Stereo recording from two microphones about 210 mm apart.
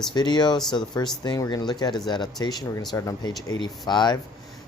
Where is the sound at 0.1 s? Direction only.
20° left (ahead or behind).